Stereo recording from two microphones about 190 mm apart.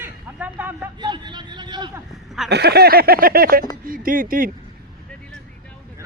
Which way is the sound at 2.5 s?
60° right (ahead or behind).